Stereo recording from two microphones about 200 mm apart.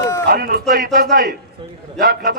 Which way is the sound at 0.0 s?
15° left (ahead or behind).